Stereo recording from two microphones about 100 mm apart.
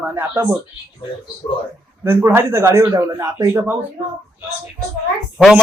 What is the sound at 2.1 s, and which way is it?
A man's voice, 25° right (ahead or behind).